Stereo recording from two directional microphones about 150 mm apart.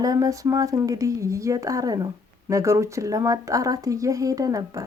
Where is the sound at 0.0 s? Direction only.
25° right (ahead or behind).